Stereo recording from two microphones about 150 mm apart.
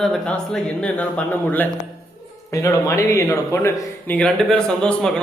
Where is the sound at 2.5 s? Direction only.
20° left (ahead or behind).